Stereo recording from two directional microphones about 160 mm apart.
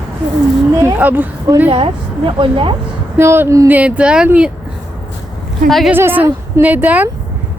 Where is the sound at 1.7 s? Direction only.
35° right (ahead or behind).